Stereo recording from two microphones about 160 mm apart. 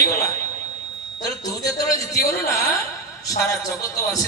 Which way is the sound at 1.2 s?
20° left (ahead or behind).